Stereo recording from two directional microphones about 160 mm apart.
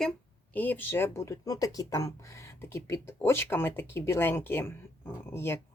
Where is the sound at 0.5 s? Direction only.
10° left (ahead or behind).